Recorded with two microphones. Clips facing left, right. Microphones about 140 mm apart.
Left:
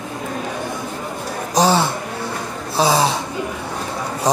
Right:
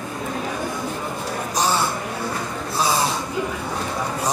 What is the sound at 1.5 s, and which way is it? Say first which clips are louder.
A man's voice: left 7 dB; 90° left.